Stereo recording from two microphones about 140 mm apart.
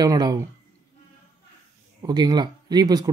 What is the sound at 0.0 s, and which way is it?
Speech, 25° right (ahead or behind).